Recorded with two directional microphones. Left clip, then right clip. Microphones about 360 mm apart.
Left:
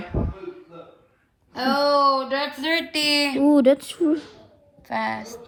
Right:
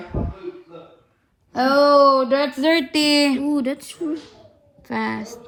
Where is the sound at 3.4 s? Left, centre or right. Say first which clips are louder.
Left 7 dB; left.